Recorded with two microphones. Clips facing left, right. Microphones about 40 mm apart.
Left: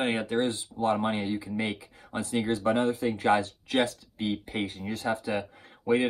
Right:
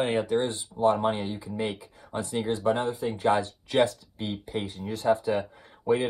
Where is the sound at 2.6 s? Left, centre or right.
Left.